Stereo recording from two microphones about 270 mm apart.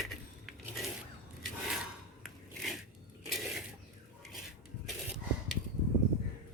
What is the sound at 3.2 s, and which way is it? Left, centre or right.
Mechanisms, centre.